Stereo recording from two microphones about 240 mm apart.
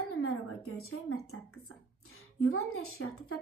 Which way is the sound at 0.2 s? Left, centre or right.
Left.